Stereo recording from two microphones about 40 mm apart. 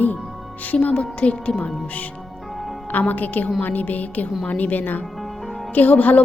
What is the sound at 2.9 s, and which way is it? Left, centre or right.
A woman's voice, left.